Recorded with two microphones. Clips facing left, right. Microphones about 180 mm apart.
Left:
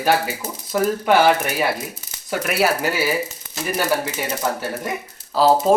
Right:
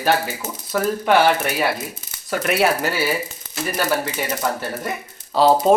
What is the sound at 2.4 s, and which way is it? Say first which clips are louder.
Speech: right 1 dB; 5° left (ahead or behind).